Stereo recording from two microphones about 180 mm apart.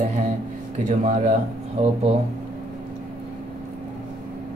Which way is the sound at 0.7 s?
45° right (ahead or behind).